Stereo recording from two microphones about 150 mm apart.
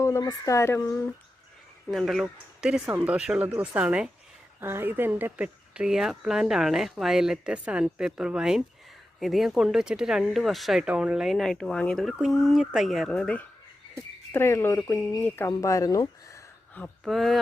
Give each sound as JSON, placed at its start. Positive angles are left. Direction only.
{"t": 0.0, "sound": "speech", "side_deg": 25}
{"t": 1.9, "sound": "speech", "side_deg": 0}
{"t": 17.0, "sound": "speech", "side_deg": 0}